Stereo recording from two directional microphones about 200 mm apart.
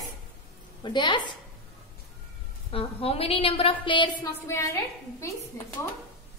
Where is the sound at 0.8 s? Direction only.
25° left (ahead or behind).